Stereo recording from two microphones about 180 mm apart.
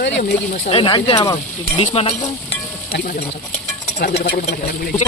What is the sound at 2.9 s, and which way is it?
Speech, 60° left (ahead or behind).